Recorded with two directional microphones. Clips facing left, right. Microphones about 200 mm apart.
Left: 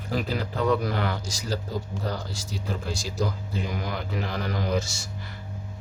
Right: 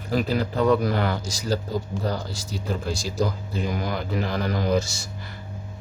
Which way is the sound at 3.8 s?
40° right (ahead or behind).